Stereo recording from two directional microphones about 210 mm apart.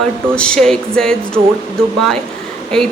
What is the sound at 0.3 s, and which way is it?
Speech, 5° left (ahead or behind).